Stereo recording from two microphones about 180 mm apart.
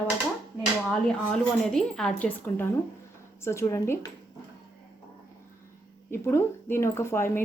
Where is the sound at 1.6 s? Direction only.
5° left (ahead or behind).